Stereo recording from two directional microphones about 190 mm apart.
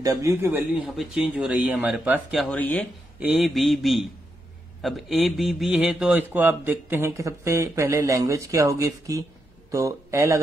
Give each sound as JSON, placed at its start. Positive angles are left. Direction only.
{"t": 0.0, "sound": "speech", "side_deg": -15}
{"t": 0.7, "sound": "speech", "side_deg": 0}
{"t": 2.4, "sound": "speech", "side_deg": 10}
{"t": 3.2, "sound": "speech", "side_deg": -5}